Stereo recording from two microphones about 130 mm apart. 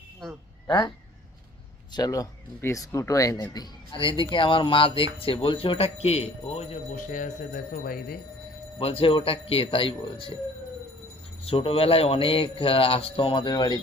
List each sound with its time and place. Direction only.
0.2 s speech: 5° left (ahead or behind)
1.9 s speech: 30° left (ahead or behind); by 6.7 s 55° left (ahead or behind)
6.9 s speech: 85° left
8.8 s speech: 45° left (ahead or behind)
11.4 s speech: 45° left (ahead or behind)